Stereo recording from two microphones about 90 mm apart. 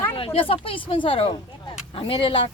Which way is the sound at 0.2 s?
90° left.